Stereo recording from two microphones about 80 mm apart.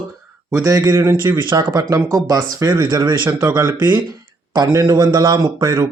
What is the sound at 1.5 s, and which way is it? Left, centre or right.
Speech, right.